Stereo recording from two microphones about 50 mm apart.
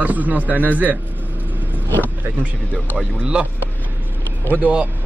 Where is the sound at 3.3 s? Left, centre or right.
Right.